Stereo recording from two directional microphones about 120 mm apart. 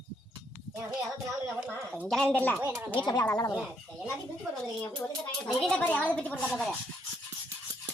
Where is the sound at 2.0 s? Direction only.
5° left (ahead or behind).